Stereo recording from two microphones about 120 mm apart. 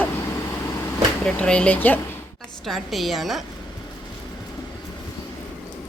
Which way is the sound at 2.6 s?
Centre (ahead or behind).